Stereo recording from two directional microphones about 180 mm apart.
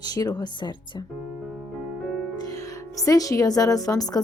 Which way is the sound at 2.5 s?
15° left (ahead or behind).